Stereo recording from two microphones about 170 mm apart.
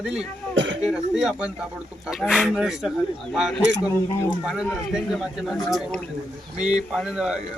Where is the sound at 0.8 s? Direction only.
5° right (ahead or behind).